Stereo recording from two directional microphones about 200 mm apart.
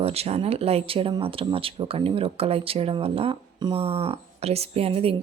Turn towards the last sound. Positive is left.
turn(degrees=-30)  # may be behind; listen again after turning